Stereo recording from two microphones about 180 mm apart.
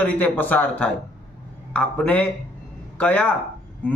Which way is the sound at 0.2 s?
10° left (ahead or behind).